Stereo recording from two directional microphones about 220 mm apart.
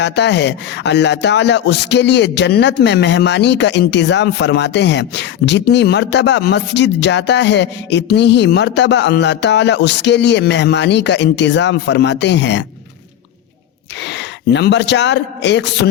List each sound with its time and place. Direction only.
0.0 s speech: 50° left (ahead or behind)
14.0 s speech: 50° left (ahead or behind)